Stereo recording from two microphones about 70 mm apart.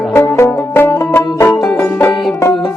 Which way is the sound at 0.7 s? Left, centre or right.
Left.